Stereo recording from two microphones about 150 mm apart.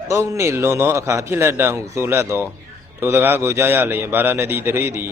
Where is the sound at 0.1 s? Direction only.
20° right (ahead or behind).